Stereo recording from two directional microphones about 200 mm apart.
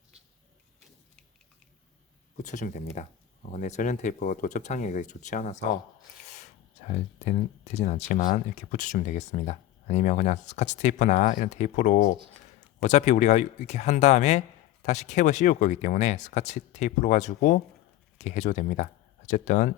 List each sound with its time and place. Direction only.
2.4 s speech: 40° left (ahead or behind)